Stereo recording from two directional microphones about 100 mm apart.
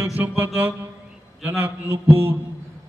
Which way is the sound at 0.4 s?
20° right (ahead or behind).